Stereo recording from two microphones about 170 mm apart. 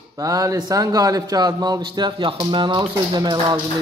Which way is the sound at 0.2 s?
20° right (ahead or behind).